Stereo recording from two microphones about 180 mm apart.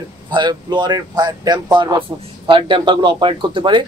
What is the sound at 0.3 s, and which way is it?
Speech, 25° right (ahead or behind).